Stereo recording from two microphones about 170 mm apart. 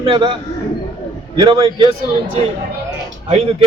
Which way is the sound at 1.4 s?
25° right (ahead or behind).